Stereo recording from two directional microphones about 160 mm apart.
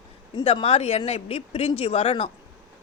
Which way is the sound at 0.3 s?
35° left (ahead or behind).